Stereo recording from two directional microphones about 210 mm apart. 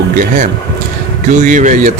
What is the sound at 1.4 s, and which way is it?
Speech, 35° right (ahead or behind).